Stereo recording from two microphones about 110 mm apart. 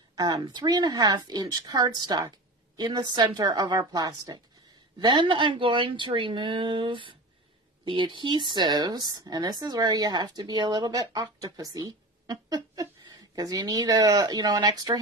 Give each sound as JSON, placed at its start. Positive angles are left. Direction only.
{"t": 0.1, "sound": "a sound", "side_deg": -40}
{"t": 0.4, "sound": "speech", "side_deg": -40}
{"t": 5.0, "sound": "speech", "side_deg": -45}